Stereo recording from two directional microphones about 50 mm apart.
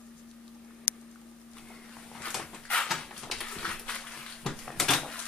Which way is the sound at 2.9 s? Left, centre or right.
Centre.